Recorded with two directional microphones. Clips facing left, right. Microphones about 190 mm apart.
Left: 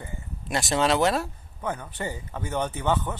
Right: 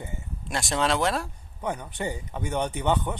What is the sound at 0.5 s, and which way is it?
Speech, centre (ahead or behind).